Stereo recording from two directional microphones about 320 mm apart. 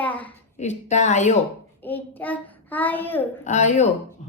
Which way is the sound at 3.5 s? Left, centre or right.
Left.